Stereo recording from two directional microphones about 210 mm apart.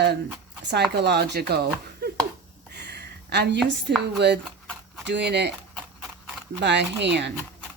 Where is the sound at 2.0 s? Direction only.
50° right (ahead or behind).